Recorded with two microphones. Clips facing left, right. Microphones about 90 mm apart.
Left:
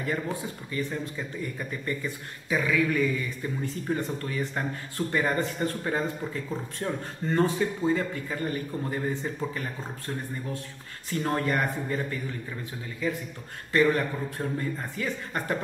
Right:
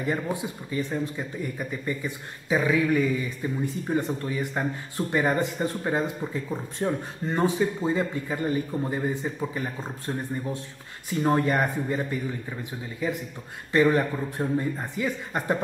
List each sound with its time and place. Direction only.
0.0 s speech: 20° right (ahead or behind)